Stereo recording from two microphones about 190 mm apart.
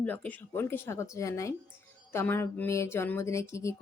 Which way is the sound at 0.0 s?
10° left (ahead or behind).